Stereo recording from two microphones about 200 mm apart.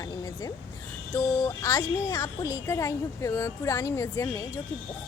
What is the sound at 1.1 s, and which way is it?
Speech, 15° left (ahead or behind).